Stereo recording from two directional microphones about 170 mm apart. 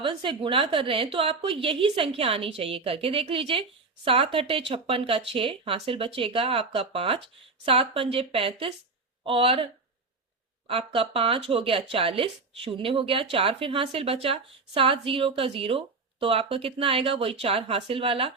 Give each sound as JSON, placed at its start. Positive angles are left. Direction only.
{"t": 0.0, "sound": "a woman's voice", "side_deg": -30}
{"t": 10.7, "sound": "a woman's voice", "side_deg": -35}